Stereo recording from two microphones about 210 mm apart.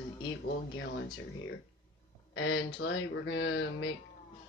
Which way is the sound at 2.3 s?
65° left (ahead or behind).